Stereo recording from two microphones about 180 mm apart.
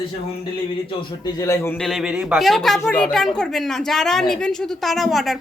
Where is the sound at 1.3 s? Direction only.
20° left (ahead or behind).